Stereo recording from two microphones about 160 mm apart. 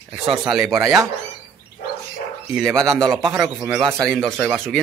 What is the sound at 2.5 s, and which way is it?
A man's voice, centre (ahead or behind).